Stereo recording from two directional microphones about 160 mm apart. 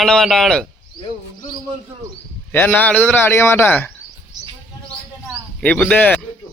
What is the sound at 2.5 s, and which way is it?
A man's voice, 10° left (ahead or behind).